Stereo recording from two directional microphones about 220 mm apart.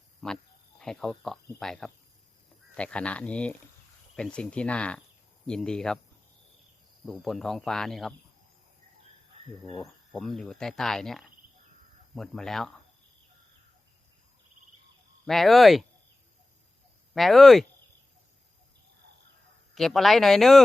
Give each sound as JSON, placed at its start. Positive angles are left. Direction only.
{"t": 0.2, "sound": "speech", "side_deg": 0}
{"t": 7.0, "sound": "speech", "side_deg": 0}
{"t": 10.1, "sound": "speech", "side_deg": 0}
{"t": 15.3, "sound": "speech", "side_deg": 0}
{"t": 17.2, "sound": "speech", "side_deg": 0}
{"t": 19.7, "sound": "speech", "side_deg": 0}